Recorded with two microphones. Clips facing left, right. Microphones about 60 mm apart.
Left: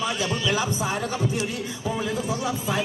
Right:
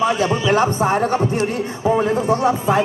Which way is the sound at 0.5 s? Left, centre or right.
Right.